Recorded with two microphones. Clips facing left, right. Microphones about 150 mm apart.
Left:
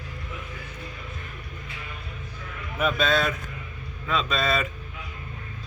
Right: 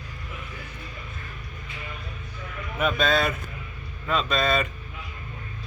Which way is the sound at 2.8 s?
Centre (ahead or behind).